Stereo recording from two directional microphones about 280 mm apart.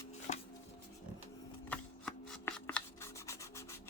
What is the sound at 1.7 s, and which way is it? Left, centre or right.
Rub, centre.